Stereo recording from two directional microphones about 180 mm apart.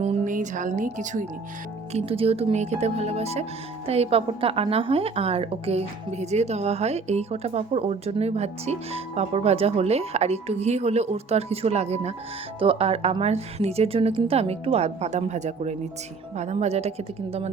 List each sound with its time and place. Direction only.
0.0 s a woman's voice: 40° right (ahead or behind)